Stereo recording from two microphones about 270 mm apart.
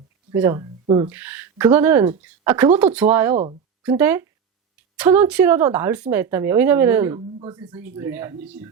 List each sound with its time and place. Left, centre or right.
0.3 s a woman's voice: centre
3.3 s speech: right
3.8 s a woman's voice: centre